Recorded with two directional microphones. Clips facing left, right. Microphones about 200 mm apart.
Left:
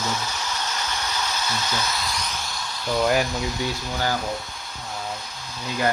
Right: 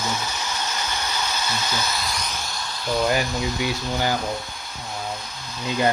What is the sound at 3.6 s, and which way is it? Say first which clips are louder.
Speech: right 2 dB; 15° right (ahead or behind).